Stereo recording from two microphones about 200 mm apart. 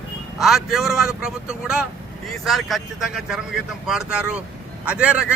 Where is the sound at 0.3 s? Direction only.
Centre (ahead or behind).